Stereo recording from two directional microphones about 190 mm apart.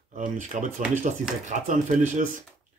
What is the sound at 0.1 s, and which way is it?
Speech, 45° right (ahead or behind).